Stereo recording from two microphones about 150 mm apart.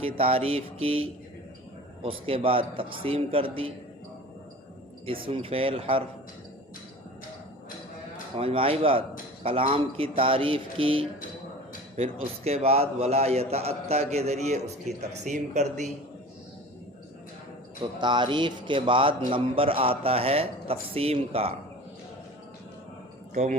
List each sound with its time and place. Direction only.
0.0 s a man's voice: 40° right (ahead or behind)
5.0 s a man's voice: 35° right (ahead or behind)
8.4 s a man's voice: 40° right (ahead or behind)
12.1 s a man's voice: 45° right (ahead or behind)
18.0 s a man's voice: 30° right (ahead or behind)
23.3 s speech: 55° right (ahead or behind)